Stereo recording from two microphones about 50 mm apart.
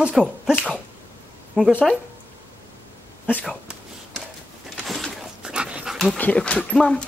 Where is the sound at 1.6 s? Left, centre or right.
Centre.